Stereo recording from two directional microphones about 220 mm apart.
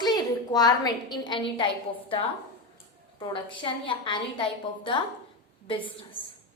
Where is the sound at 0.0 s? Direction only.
20° left (ahead or behind).